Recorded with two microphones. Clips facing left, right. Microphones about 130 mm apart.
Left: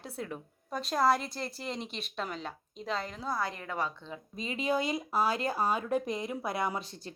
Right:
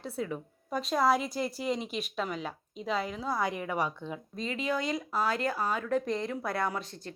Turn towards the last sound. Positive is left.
turn(degrees=20)  # may be behind; listen again after turning